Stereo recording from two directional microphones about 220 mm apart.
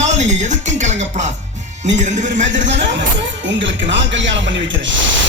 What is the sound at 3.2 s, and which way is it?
Speech, 55° right (ahead or behind).